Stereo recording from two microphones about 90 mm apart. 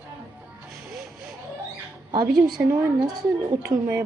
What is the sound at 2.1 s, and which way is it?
Speech, 50° right (ahead or behind).